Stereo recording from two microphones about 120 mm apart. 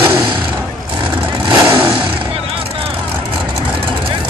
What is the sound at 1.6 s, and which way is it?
Vehicle, 20° right (ahead or behind).